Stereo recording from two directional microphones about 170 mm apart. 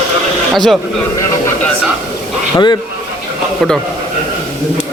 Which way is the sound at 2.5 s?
25° left (ahead or behind).